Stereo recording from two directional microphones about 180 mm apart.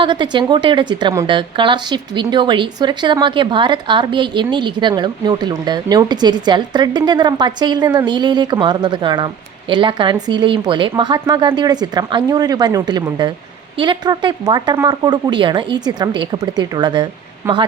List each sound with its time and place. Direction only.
0.0 s speech: 25° right (ahead or behind)